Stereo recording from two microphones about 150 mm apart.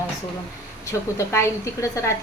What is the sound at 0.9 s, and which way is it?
A woman's voice, 20° left (ahead or behind).